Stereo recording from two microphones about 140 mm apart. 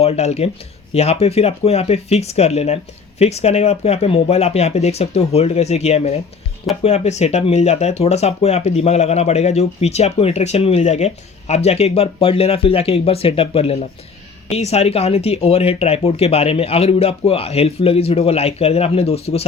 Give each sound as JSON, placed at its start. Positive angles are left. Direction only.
{"t": 0.0, "sound": "speech", "side_deg": 50}